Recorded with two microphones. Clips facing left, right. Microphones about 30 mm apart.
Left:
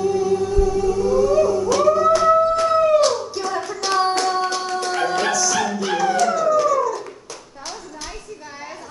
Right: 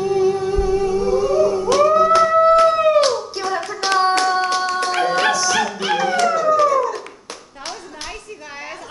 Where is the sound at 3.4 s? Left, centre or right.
Right.